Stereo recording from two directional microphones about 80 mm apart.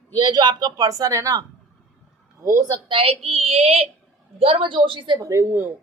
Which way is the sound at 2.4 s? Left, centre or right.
Right.